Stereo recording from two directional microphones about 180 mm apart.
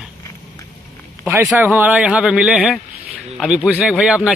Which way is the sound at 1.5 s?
10° right (ahead or behind).